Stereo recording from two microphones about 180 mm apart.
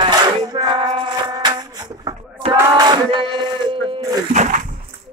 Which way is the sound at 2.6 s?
20° right (ahead or behind).